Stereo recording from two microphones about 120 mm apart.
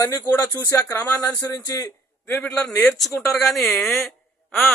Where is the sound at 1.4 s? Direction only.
30° left (ahead or behind).